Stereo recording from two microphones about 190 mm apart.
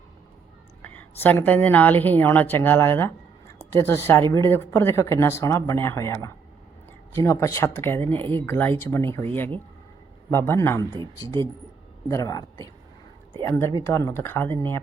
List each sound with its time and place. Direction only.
0.8 s a woman's voice: 10° left (ahead or behind)
10.3 s a woman's voice: 15° left (ahead or behind)
12.0 s a woman's voice: 15° left (ahead or behind)